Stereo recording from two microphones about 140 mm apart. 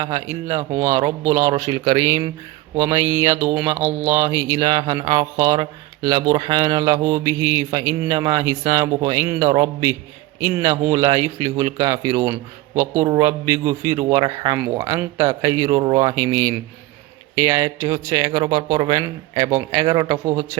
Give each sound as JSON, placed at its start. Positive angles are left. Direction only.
{"t": 0.0, "sound": "speech", "side_deg": -25}